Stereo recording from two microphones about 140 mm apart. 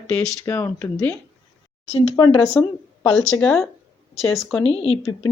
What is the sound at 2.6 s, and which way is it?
A woman's voice, 10° left (ahead or behind).